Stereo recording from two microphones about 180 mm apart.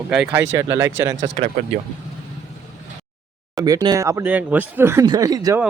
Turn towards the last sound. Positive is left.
turn(degrees=-20)  # may be behind; listen again after turning